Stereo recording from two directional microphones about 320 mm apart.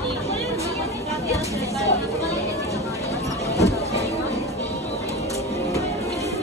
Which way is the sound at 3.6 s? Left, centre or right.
Centre.